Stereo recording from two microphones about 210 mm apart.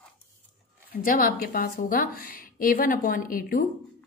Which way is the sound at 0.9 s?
45° left (ahead or behind).